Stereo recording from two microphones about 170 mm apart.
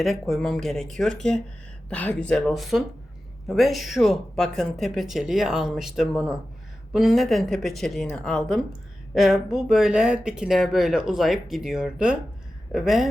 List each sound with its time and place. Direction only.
0.0 s speech: centre (ahead or behind)